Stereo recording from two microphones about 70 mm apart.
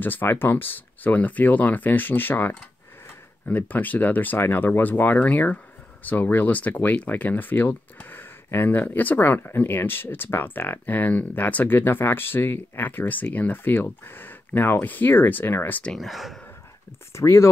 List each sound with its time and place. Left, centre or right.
0.0 s speech: left
15.8 s speech: centre
17.1 s speech: left